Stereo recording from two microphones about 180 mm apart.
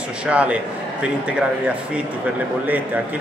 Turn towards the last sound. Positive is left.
turn(degrees=-10)  # may be behind; listen again after turning